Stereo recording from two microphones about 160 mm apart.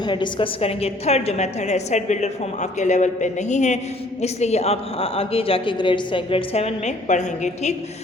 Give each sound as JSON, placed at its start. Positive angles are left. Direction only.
{"t": 0.0, "sound": "a woman's voice", "side_deg": 30}